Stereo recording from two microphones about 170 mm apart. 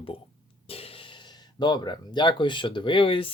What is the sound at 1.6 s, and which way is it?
Speech, 25° left (ahead or behind).